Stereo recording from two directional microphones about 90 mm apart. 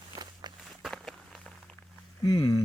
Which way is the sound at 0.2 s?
55° right (ahead or behind).